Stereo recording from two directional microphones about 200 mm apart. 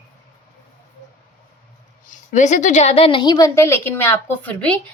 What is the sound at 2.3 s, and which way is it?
A woman's voice, 40° left (ahead or behind).